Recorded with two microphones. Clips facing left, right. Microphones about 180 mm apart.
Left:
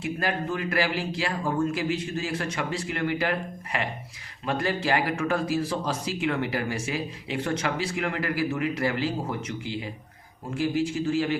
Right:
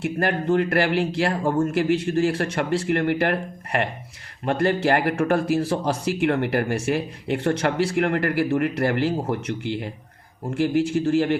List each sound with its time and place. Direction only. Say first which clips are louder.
0.0 s speech: right 5 dB; 55° right (ahead or behind)